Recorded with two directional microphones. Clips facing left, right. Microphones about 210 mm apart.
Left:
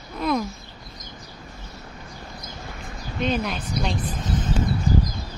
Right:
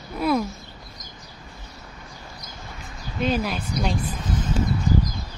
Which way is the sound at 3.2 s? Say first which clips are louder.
Right 1 dB; 5° right (ahead or behind).